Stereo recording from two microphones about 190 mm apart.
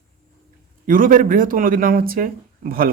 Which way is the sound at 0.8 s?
45° right (ahead or behind).